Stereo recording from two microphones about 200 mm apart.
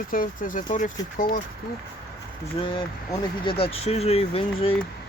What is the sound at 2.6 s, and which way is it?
Speech, 25° left (ahead or behind).